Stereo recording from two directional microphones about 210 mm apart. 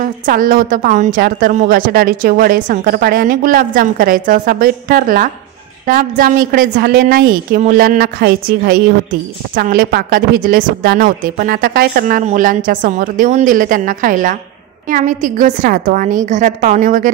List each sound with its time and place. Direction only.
0.0 s a woman's voice: 40° right (ahead or behind)